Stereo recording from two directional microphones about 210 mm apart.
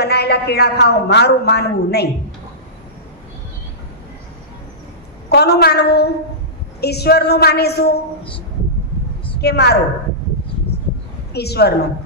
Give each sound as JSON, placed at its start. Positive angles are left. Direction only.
{"t": 0.0, "sound": "a woman's voice", "side_deg": 50}
{"t": 5.3, "sound": "a woman's voice", "side_deg": 50}
{"t": 9.4, "sound": "a woman's voice", "side_deg": 50}
{"t": 11.3, "sound": "a woman's voice", "side_deg": 50}